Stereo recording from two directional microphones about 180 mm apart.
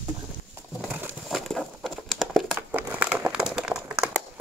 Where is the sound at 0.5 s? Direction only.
10° right (ahead or behind).